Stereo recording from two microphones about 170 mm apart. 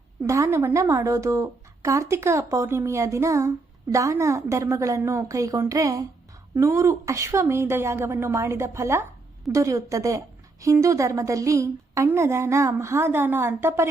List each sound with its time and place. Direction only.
0.2 s a woman's voice: 15° right (ahead or behind)